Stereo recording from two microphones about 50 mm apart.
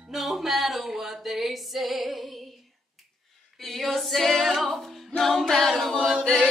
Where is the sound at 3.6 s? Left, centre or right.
Centre.